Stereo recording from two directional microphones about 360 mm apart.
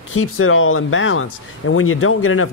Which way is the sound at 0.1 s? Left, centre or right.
Left.